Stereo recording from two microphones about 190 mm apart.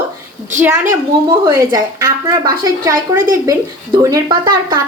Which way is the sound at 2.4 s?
20° right (ahead or behind).